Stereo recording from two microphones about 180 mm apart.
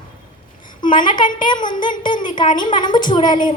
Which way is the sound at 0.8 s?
25° left (ahead or behind).